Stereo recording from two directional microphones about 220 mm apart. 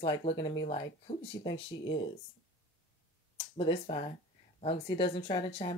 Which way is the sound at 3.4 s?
25° left (ahead or behind).